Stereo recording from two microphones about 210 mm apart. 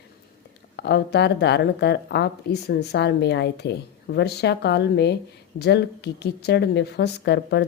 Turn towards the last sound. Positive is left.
turn(degrees=55)  # may be behind; listen again after turning